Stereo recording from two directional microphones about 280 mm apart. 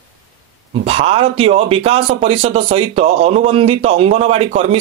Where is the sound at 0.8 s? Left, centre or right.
Right.